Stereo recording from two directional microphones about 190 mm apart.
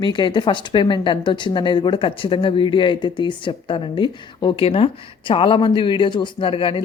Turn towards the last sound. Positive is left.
turn(degrees=30)  # may be behind; listen again after turning